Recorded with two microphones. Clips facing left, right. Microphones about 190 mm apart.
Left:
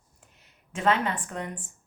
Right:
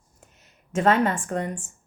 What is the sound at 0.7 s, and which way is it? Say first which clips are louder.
Speech: right 5 dB; 45° right (ahead or behind).